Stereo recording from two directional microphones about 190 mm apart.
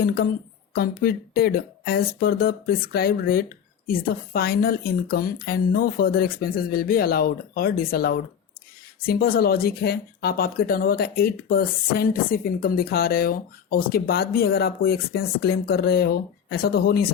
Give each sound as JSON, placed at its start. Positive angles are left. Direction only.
{"t": 0.0, "sound": "speech", "side_deg": 50}